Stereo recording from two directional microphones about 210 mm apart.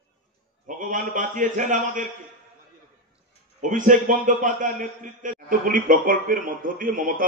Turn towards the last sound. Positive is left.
turn(degrees=-40)  # may be behind; listen again after turning